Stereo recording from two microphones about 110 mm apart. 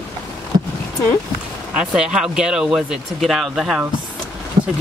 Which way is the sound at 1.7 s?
10° right (ahead or behind).